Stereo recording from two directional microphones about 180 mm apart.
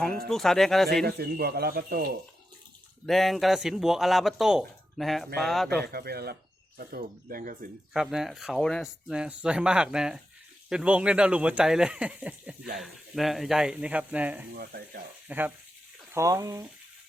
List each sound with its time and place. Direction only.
0.3 s speech: centre (ahead or behind)
1.0 s a man's voice: 60° right (ahead or behind)
3.1 s speech: centre (ahead or behind)
5.8 s a man's voice: 60° right (ahead or behind)
7.9 s speech: centre (ahead or behind)
14.6 s a man's voice: 60° right (ahead or behind)
15.3 s speech: 10° right (ahead or behind)